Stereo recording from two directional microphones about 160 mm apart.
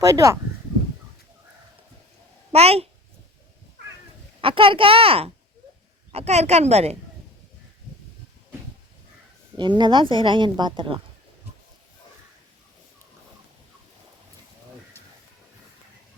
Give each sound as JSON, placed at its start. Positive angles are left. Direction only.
{"t": 0.0, "sound": "a woman's voice", "side_deg": -20}
{"t": 2.5, "sound": "speech", "side_deg": -40}
{"t": 4.4, "sound": "a woman's voice", "side_deg": -35}
{"t": 9.6, "sound": "a woman's voice", "side_deg": -30}